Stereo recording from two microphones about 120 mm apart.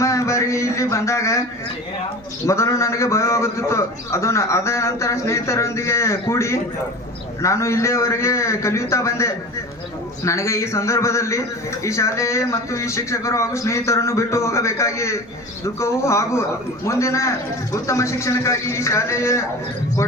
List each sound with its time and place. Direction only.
0.0 s speech: 25° left (ahead or behind)
2.5 s a man's voice: 25° left (ahead or behind)